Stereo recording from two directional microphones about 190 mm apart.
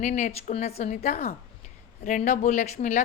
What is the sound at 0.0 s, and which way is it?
A woman's voice, 40° left (ahead or behind).